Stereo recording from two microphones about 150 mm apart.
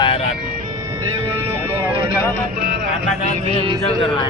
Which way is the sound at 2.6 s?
90° right.